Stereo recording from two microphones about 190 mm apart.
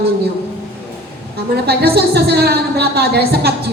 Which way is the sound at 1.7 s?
55° right (ahead or behind).